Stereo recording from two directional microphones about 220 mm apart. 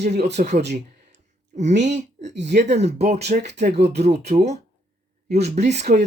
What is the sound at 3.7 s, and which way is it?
Speech, 50° right (ahead or behind).